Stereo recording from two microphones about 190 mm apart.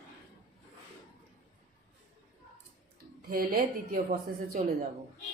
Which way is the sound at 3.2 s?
50° right (ahead or behind).